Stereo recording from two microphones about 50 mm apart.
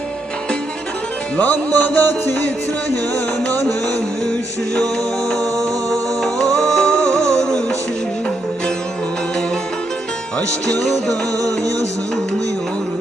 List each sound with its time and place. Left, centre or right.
1.4 s music: left
3.5 s music: left
5.3 s music: centre